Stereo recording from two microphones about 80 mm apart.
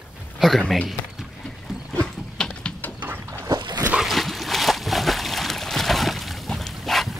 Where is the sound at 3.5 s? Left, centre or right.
Right.